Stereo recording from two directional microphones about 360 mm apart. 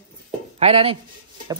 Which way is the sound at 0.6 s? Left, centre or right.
Centre.